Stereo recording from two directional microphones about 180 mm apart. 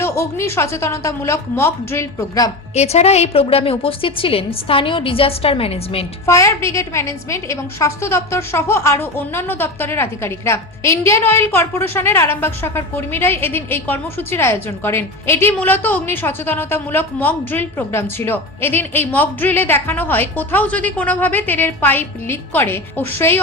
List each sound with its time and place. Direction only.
0.0 s a woman's voice: 15° left (ahead or behind)
2.7 s a woman's voice: 35° left (ahead or behind)
6.2 s a woman's voice: 15° left (ahead or behind)